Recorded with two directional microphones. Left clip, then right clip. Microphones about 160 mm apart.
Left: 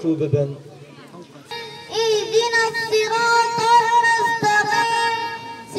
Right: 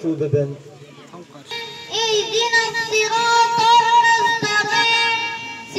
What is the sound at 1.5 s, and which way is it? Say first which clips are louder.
Music: right 2 dB; 40° right (ahead or behind).